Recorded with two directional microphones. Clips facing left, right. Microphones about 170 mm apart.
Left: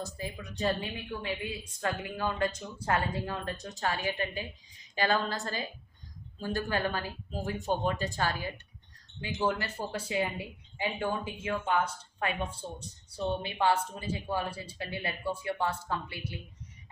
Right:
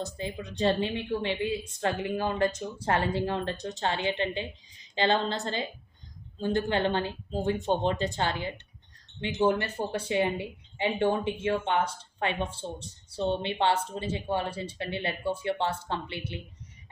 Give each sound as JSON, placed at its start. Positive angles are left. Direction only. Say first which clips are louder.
{"t": 0.2, "sound": "speech", "louder": "right 5 dB", "side_deg": -25}